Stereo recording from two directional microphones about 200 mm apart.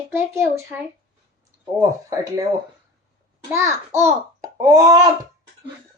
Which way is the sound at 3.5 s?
15° right (ahead or behind).